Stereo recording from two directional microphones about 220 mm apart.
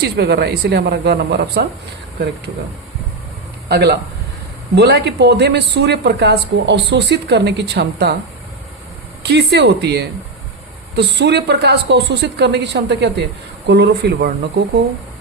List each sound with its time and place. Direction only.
0.0 s speech: 45° right (ahead or behind)
3.7 s speech: 45° right (ahead or behind)
9.2 s speech: 50° right (ahead or behind)